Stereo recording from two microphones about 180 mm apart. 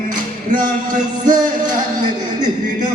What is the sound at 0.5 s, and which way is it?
Speech, 45° right (ahead or behind).